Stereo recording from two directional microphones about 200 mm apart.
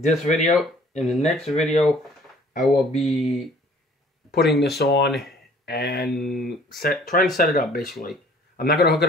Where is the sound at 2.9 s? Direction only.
Centre (ahead or behind).